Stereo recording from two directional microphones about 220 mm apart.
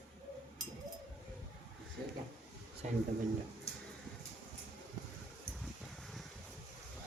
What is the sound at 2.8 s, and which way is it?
Speech, 35° right (ahead or behind).